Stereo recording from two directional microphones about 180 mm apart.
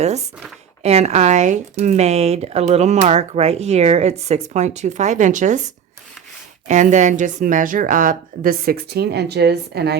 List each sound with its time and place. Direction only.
0.0 s speech: 40° right (ahead or behind); by 10.0 s 65° right (ahead or behind)